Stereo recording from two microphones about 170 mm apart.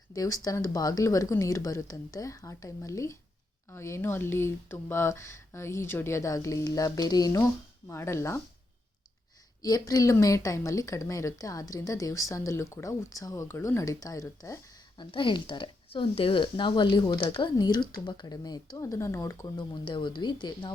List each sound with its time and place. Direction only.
0.1 s speech: 20° left (ahead or behind)
9.6 s speech: 20° left (ahead or behind)